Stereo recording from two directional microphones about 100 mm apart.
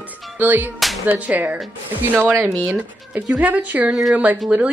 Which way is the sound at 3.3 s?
10° right (ahead or behind).